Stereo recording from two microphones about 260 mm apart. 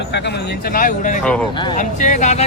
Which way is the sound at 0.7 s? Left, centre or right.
Left.